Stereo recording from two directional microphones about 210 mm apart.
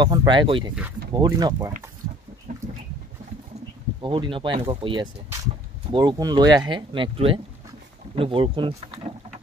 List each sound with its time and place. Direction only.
0.0 s speech: 20° right (ahead or behind)
4.0 s speech: 25° right (ahead or behind)